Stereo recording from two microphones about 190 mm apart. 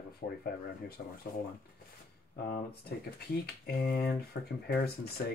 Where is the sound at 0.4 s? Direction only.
55° left (ahead or behind).